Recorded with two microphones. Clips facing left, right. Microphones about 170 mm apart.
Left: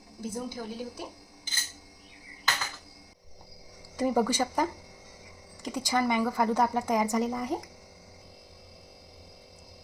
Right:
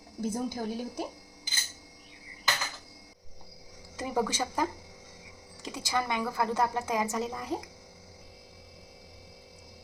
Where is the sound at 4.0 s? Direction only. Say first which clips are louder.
Left 5 dB; 10° left (ahead or behind).